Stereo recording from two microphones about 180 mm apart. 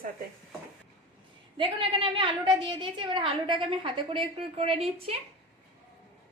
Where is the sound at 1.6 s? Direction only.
30° right (ahead or behind).